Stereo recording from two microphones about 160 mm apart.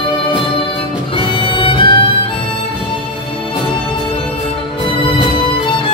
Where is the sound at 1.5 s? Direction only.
30° left (ahead or behind).